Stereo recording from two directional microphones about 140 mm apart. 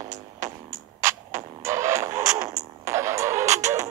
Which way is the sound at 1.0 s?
20° right (ahead or behind).